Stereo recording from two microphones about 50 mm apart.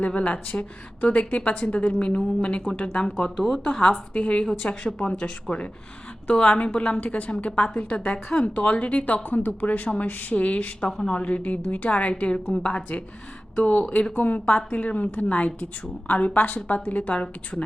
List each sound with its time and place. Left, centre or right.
0.0 s a woman's voice: left
3.3 s speech: centre
3.6 s a woman's voice: left
4.4 s speech: centre
5.2 s a woman's voice: left
10.8 s speech: centre
11.1 s a woman's voice: left